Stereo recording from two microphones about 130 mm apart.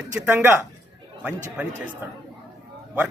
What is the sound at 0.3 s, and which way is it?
Speech, 15° right (ahead or behind).